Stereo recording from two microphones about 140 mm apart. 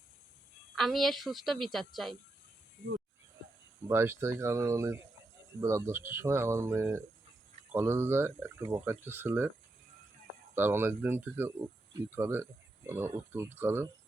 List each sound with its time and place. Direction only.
0.8 s a woman's voice: centre (ahead or behind)
3.8 s speech: 20° right (ahead or behind)
10.5 s speech: 15° right (ahead or behind)